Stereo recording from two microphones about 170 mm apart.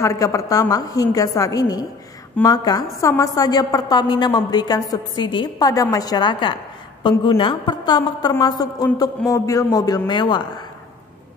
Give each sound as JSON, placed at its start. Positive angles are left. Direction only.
{"t": 0.0, "sound": "a woman's voice", "side_deg": 20}